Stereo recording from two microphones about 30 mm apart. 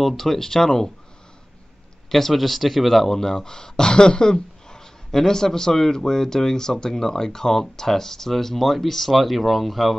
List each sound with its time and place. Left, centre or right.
0.0 s speech: centre
2.0 s speech: centre